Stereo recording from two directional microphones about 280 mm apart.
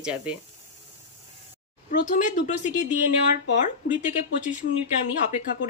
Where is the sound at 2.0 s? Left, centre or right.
Left.